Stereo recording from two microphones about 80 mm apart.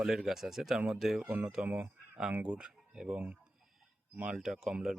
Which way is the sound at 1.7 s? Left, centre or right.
Right.